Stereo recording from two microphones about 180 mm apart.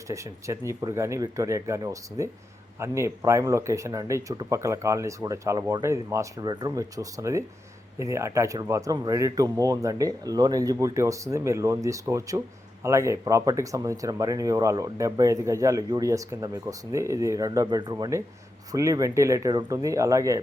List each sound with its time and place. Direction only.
0.1 s speech: 15° right (ahead or behind)